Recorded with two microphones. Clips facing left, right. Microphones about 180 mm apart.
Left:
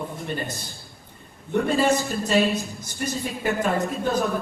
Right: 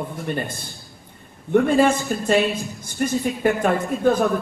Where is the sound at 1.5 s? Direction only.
50° right (ahead or behind).